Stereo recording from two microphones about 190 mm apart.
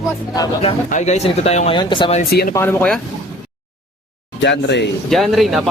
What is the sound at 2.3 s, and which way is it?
Speech, 55° left (ahead or behind).